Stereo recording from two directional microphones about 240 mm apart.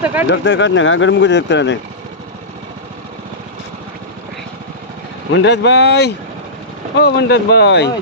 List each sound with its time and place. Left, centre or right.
0.0 s speech: centre
0.3 s speech: left
5.3 s speech: left